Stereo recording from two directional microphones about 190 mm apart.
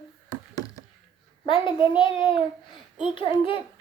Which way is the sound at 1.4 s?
25° left (ahead or behind).